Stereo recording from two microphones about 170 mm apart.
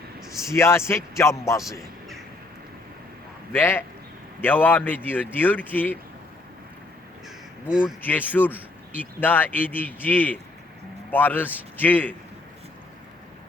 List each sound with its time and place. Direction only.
0.4 s a man's voice: 15° left (ahead or behind)
3.5 s a man's voice: 10° left (ahead or behind)
7.7 s speech: 5° right (ahead or behind)
8.0 s a man's voice: 10° left (ahead or behind)